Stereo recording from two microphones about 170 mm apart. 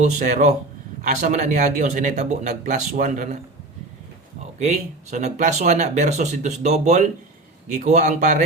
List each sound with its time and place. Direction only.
0.0 s speech: 45° right (ahead or behind)
4.6 s speech: 40° right (ahead or behind)